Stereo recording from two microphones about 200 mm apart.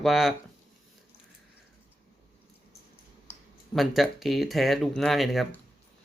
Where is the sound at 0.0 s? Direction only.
Centre (ahead or behind).